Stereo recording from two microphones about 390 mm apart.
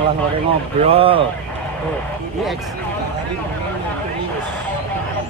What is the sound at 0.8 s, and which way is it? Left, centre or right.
Speech, centre.